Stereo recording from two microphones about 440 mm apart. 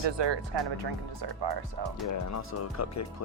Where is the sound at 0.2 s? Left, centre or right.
Right.